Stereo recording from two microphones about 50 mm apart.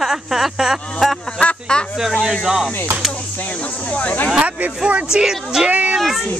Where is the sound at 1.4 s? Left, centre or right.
Left.